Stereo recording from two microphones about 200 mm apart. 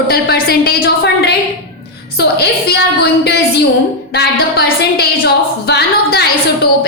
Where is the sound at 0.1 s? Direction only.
50° left (ahead or behind).